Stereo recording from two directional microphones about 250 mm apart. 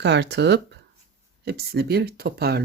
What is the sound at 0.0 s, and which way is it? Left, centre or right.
Speech, right.